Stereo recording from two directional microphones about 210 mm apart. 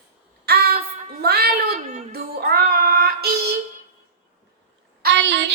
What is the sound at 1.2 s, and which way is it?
Music, 50° right (ahead or behind).